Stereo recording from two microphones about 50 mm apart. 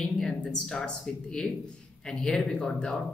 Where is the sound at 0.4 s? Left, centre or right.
Centre.